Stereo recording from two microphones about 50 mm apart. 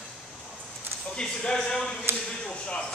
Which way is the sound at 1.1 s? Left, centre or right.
Centre.